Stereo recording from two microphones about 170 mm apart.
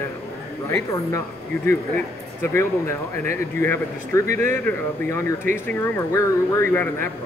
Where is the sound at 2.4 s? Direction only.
15° left (ahead or behind).